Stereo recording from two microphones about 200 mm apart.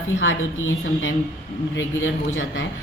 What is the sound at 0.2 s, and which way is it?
A woman's voice, 70° left (ahead or behind).